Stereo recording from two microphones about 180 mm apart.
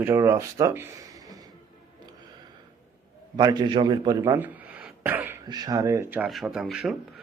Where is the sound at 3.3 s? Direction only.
25° right (ahead or behind).